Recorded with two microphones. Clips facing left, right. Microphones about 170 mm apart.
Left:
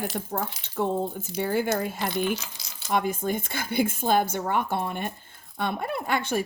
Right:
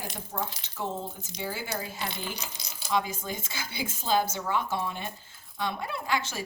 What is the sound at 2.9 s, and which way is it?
A woman's voice, 55° left (ahead or behind).